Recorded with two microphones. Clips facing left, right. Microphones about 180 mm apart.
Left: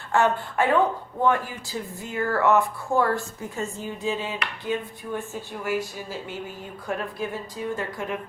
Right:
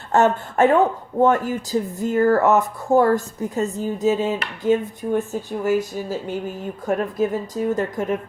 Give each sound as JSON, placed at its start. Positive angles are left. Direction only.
{"t": 0.1, "sound": "a woman's voice", "side_deg": -45}